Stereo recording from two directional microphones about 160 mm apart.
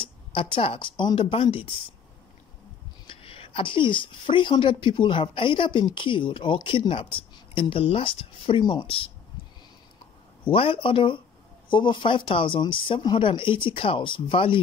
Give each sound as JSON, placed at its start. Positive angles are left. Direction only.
{"t": 0.0, "sound": "a woman's voice", "side_deg": 35}
{"t": 3.1, "sound": "a woman's voice", "side_deg": 35}
{"t": 10.5, "sound": "a woman's voice", "side_deg": 35}